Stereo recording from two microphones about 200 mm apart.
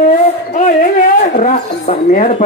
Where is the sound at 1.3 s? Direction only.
40° left (ahead or behind).